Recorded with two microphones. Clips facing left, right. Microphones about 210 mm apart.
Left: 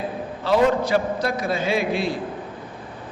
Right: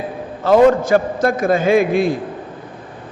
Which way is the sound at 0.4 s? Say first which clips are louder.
Right 7 dB; 50° right (ahead or behind).